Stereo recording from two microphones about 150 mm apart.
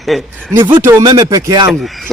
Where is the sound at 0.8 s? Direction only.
20° right (ahead or behind).